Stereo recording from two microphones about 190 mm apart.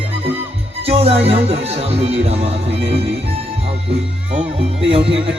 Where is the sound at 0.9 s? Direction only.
35° right (ahead or behind).